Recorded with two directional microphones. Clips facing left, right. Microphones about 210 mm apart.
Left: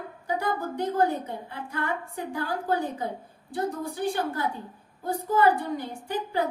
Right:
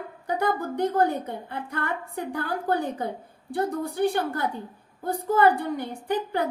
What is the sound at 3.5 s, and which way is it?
A woman's voice, 60° right (ahead or behind).